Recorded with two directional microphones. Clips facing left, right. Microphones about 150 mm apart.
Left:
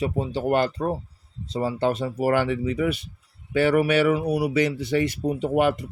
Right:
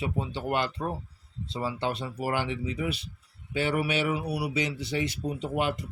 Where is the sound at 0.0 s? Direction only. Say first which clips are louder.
Left 7 dB; 40° left (ahead or behind).